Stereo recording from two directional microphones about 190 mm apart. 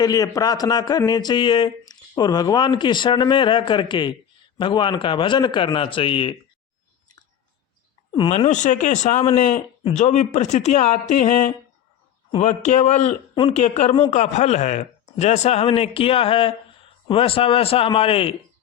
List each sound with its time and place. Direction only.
0.0 s speech: 20° left (ahead or behind)
8.3 s speech: 40° left (ahead or behind)